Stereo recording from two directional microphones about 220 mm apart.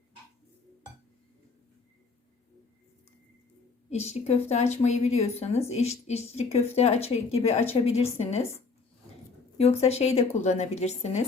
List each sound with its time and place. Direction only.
3.8 s a woman's voice: 30° left (ahead or behind)
9.6 s a woman's voice: 30° left (ahead or behind)